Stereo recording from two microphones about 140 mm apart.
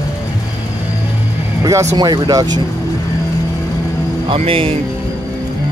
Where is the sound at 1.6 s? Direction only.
20° right (ahead or behind).